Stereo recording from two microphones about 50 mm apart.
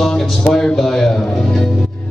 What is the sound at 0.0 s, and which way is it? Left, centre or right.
Music, centre.